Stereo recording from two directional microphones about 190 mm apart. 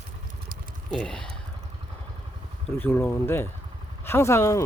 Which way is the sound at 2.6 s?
10° left (ahead or behind).